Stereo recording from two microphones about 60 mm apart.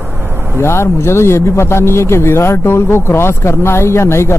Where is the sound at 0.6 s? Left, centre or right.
Left.